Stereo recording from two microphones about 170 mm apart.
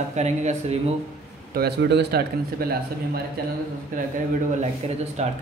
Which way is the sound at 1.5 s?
75° right (ahead or behind).